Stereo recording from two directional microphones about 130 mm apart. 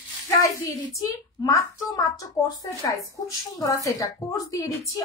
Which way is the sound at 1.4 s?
25° left (ahead or behind).